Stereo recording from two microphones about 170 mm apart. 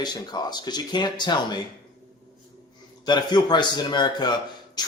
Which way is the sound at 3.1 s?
25° left (ahead or behind).